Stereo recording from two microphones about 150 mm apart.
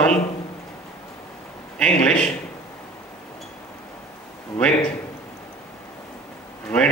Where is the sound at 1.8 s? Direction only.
10° left (ahead or behind).